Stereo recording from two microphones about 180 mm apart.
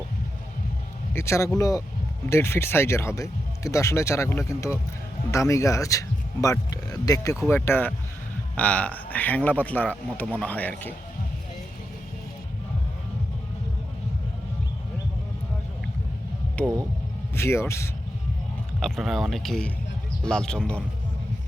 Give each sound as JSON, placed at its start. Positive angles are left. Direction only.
{"t": 1.1, "sound": "speech", "side_deg": 15}
{"t": 16.6, "sound": "speech", "side_deg": 10}
{"t": 18.8, "sound": "speech", "side_deg": 0}